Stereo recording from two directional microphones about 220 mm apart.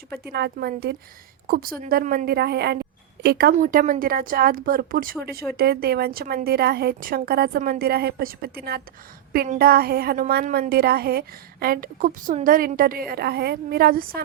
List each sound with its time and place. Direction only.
0.3 s a woman's voice: 45° right (ahead or behind)